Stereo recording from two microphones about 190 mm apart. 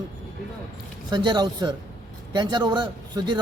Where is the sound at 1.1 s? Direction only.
25° right (ahead or behind).